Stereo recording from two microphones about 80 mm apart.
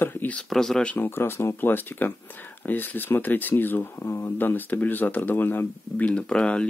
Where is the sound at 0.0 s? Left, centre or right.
Left.